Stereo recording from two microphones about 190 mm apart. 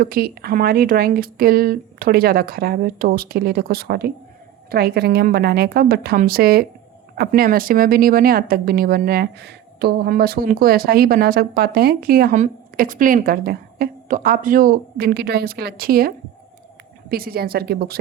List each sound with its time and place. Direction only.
0.0 s a woman's voice: 50° right (ahead or behind)